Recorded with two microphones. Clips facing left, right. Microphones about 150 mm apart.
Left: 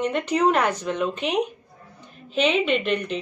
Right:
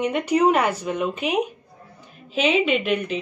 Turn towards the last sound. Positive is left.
turn(degrees=-5)  # may be behind; listen again after turning